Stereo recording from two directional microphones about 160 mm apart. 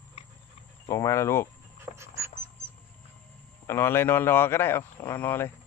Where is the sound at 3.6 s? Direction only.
15° left (ahead or behind).